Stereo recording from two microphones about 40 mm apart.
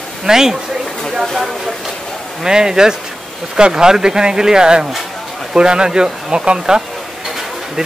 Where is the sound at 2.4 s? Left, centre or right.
Centre.